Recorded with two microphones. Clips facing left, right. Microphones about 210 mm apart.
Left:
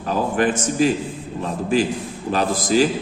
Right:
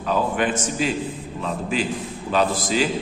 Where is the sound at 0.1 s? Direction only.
40° left (ahead or behind).